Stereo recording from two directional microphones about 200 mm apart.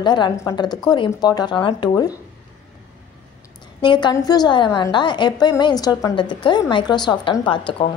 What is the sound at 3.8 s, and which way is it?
A woman's voice, 20° left (ahead or behind).